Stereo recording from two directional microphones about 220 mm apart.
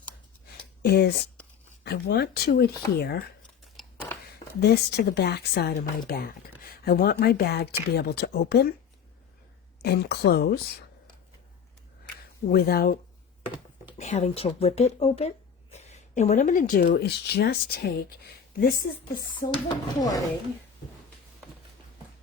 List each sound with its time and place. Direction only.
0.8 s speech: 45° left (ahead or behind)
3.6 s a sound: centre (ahead or behind)
4.6 s speech: 50° left (ahead or behind)
9.8 s speech: 50° left (ahead or behind)
12.5 s speech: 45° left (ahead or behind)
14.0 s speech: 30° left (ahead or behind)
19.6 s speech: 15° left (ahead or behind)